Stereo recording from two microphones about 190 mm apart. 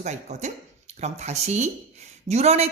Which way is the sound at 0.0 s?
35° right (ahead or behind).